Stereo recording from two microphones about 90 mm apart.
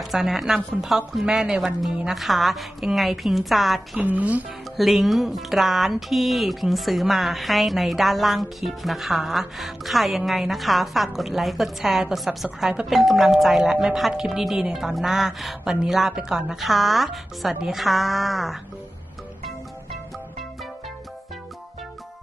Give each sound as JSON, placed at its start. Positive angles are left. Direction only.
{"t": 0.0, "sound": "speech", "side_deg": -5}
{"t": 4.0, "sound": "a woman's voice", "side_deg": -15}
{"t": 4.7, "sound": "speech", "side_deg": 0}